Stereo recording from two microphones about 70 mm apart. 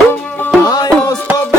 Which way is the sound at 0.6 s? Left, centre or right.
Left.